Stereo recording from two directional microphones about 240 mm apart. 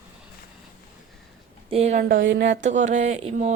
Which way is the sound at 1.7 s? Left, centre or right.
Right.